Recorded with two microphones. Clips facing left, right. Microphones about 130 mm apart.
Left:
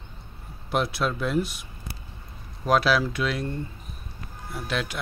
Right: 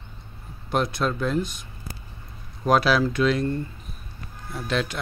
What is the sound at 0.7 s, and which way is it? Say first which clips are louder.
Speech: right 1 dB; 5° left (ahead or behind).